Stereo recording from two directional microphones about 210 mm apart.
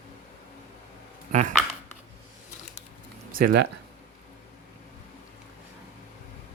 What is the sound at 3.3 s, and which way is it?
Speech, 50° right (ahead or behind).